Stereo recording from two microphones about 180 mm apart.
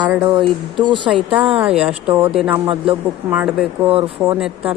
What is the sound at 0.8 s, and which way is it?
Speech, 25° right (ahead or behind).